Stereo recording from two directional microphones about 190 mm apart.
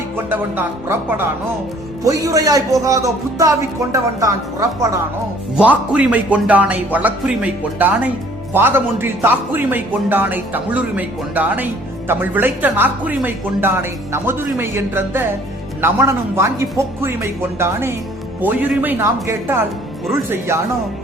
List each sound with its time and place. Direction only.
0.3 s speech: 10° right (ahead or behind)
5.5 s speech: 5° right (ahead or behind)